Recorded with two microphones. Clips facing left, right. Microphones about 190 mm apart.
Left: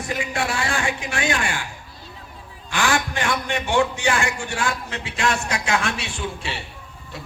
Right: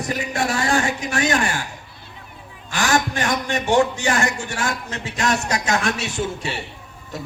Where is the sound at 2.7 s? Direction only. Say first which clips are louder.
Right 2 dB; 40° right (ahead or behind).